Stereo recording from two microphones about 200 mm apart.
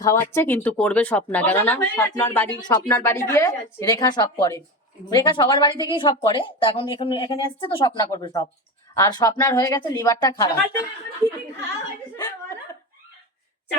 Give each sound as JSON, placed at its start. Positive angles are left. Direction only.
{"t": 0.0, "sound": "speech", "side_deg": 15}
{"t": 2.6, "sound": "speech", "side_deg": 20}
{"t": 12.1, "sound": "a sound", "side_deg": 20}